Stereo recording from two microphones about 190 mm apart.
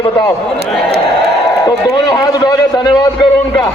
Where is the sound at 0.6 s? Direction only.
60° right (ahead or behind).